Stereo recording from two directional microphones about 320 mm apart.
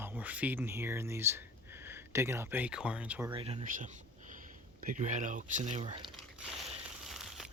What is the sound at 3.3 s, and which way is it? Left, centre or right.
Speech, centre.